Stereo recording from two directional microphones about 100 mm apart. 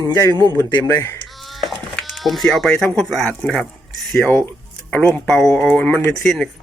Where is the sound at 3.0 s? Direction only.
5° left (ahead or behind).